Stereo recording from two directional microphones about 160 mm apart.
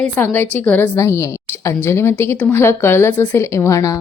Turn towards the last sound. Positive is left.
turn(degrees=20)  # may be behind; listen again after turning